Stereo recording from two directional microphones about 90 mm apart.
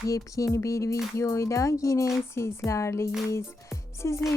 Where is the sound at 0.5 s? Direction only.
35° left (ahead or behind).